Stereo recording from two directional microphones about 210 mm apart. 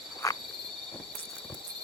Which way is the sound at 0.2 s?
15° left (ahead or behind).